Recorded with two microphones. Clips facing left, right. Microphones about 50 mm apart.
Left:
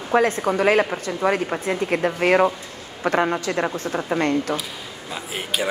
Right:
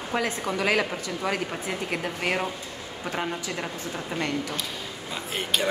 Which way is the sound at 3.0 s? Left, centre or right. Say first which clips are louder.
Left 10 dB; left.